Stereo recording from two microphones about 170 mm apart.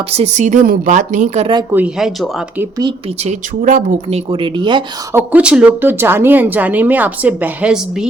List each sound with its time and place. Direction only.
0.1 s speech: 40° right (ahead or behind)
1.7 s speech: 5° right (ahead or behind)
3.2 s speech: 50° right (ahead or behind)
4.3 s speech: 30° right (ahead or behind)
5.1 s speech: 5° right (ahead or behind)